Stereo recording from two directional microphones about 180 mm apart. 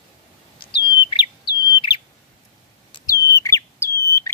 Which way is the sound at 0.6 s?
30° left (ahead or behind).